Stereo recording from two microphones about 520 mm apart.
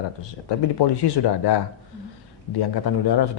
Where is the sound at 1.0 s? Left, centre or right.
Left.